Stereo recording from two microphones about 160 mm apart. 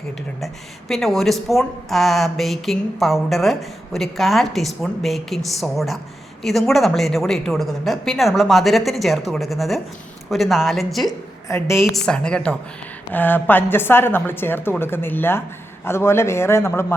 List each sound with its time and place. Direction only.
0.3 s speech: centre (ahead or behind)
11.4 s a woman's voice: 15° left (ahead or behind)
11.8 s a woman's voice: 5° left (ahead or behind)